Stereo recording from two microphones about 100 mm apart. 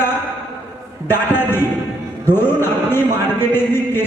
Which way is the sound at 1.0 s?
20° left (ahead or behind).